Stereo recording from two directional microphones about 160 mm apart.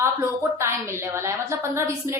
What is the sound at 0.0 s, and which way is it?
A woman's voice, 15° right (ahead or behind).